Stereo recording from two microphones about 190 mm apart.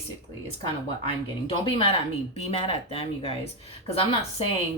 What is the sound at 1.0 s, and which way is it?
Speech, 30° left (ahead or behind).